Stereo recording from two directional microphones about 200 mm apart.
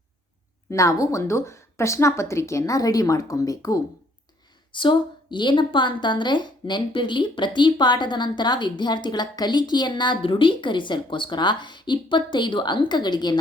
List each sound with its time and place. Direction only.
0.7 s a woman's voice: 15° left (ahead or behind)